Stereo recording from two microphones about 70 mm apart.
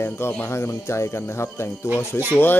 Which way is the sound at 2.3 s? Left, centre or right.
Left.